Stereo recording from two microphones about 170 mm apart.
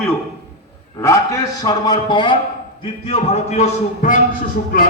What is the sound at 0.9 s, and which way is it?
A man's voice, 15° left (ahead or behind).